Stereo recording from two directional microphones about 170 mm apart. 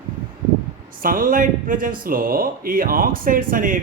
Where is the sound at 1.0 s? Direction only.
55° right (ahead or behind).